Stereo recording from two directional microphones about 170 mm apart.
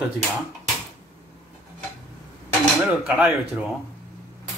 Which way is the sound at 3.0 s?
10° right (ahead or behind).